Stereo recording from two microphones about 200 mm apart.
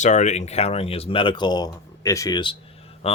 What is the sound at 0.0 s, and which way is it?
Speech, 35° left (ahead or behind).